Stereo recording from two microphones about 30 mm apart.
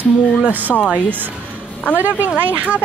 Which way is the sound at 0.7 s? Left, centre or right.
Left.